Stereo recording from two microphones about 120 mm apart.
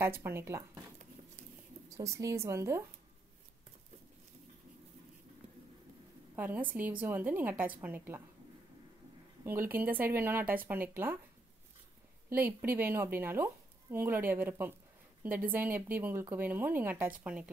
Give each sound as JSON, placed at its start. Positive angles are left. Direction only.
{"t": 0.0, "sound": "speech", "side_deg": -20}
{"t": 1.9, "sound": "speech", "side_deg": -25}
{"t": 6.3, "sound": "speech", "side_deg": -15}
{"t": 9.4, "sound": "speech", "side_deg": -20}
{"t": 12.3, "sound": "speech", "side_deg": -15}